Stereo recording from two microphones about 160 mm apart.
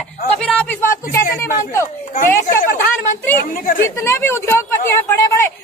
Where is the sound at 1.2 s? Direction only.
55° left (ahead or behind).